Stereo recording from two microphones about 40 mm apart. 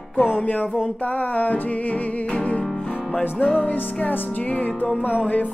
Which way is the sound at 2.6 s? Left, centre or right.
Centre.